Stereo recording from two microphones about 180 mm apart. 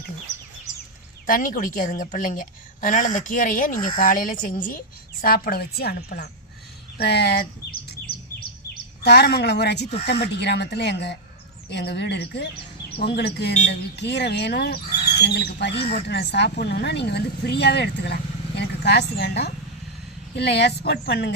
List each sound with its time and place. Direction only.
1.3 s a woman's voice: 50° left (ahead or behind); by 7.4 s 65° left (ahead or behind)
9.0 s a woman's voice: 65° left (ahead or behind)
15.7 s speech: 30° left (ahead or behind)
16.0 s speech: 65° left (ahead or behind)